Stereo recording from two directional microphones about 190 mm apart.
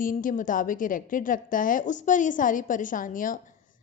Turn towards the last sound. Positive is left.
turn(degrees=45)  # may be behind; listen again after turning